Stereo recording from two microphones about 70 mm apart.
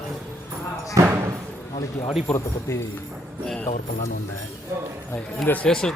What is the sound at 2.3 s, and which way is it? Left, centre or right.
Speech, centre.